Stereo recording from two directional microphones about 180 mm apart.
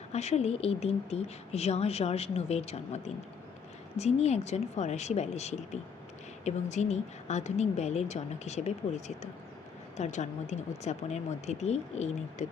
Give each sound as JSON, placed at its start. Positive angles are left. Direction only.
{"t": 0.1, "sound": "a woman's voice", "side_deg": 35}